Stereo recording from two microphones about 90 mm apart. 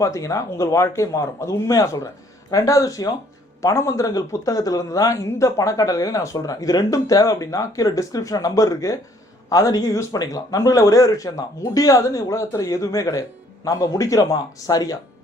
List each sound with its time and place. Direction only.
0.0 s speech: 35° left (ahead or behind)